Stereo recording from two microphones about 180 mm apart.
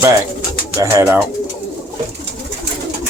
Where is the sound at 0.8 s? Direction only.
15° right (ahead or behind).